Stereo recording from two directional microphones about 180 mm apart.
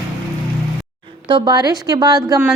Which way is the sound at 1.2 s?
25° right (ahead or behind).